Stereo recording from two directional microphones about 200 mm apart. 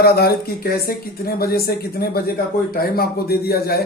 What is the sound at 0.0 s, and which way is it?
Speech, 50° left (ahead or behind).